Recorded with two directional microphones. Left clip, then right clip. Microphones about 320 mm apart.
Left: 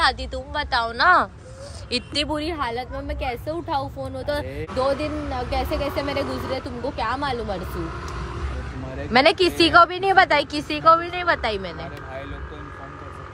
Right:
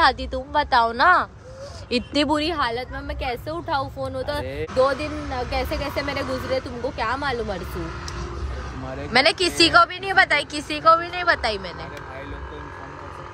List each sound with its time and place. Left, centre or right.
0.0 s speech: centre
2.1 s speech: right
2.5 s speech: centre
9.1 s speech: centre